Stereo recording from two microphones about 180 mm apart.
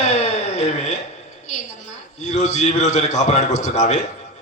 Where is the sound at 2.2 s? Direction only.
40° left (ahead or behind).